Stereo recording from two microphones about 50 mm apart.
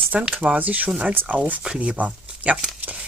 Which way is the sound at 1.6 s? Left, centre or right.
Centre.